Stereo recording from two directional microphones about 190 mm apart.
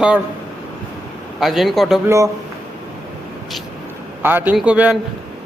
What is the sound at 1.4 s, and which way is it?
Speech, centre (ahead or behind).